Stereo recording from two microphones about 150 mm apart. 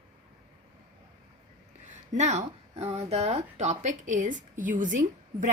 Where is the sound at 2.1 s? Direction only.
50° right (ahead or behind).